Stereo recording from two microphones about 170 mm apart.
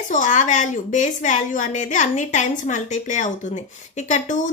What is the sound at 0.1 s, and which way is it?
A woman's voice, 50° left (ahead or behind).